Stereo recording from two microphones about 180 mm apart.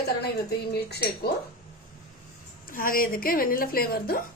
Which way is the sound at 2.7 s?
50° left (ahead or behind).